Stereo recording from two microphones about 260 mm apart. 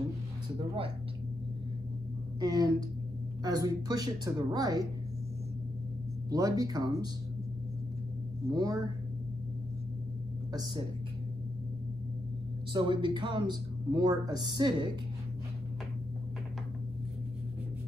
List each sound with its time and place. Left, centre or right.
2.4 s speech: centre
6.3 s speech: centre
8.5 s speech: centre
10.5 s a woman's voice: centre
12.7 s speech: centre